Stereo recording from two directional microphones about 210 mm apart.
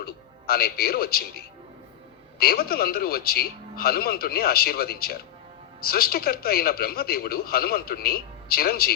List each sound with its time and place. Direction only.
0.0 s speech: 45° left (ahead or behind)